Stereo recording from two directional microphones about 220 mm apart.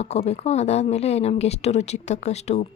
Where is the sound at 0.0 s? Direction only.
30° left (ahead or behind).